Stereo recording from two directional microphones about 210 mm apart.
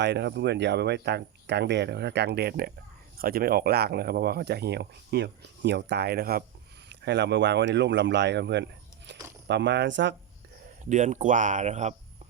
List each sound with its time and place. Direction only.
0.0 s speech: 55° right (ahead or behind)
10.8 s speech: 35° right (ahead or behind)